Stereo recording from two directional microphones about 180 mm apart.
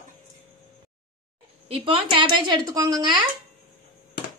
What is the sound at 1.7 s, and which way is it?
Speech, 30° right (ahead or behind).